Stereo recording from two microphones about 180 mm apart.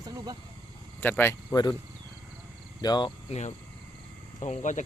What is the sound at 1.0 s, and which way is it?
Speech, 10° left (ahead or behind).